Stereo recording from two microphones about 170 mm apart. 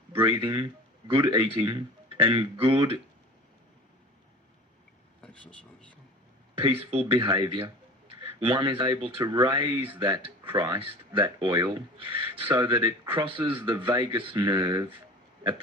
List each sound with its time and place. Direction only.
0.1 s speech: 30° right (ahead or behind)
5.2 s vehicle: 5° left (ahead or behind)
6.6 s speech: 35° right (ahead or behind)